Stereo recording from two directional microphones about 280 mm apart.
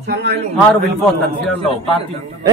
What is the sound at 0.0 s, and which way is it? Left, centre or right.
Speech, right.